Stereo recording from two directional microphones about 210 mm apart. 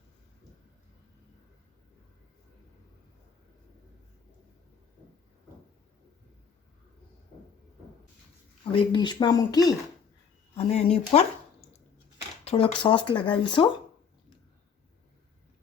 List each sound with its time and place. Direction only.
8.7 s speech: 20° left (ahead or behind)
10.5 s speech: 30° left (ahead or behind)
12.5 s speech: 25° left (ahead or behind)